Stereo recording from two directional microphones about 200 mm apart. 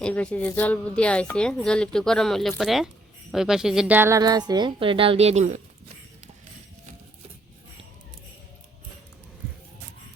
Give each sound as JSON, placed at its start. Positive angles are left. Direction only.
{"t": 0.0, "sound": "a woman's voice", "side_deg": 5}